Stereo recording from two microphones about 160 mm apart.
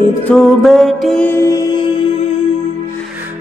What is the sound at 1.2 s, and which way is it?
Music, 15° left (ahead or behind).